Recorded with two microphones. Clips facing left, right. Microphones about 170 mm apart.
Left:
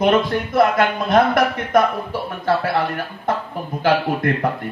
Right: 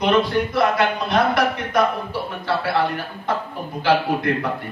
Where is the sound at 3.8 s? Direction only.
50° left (ahead or behind).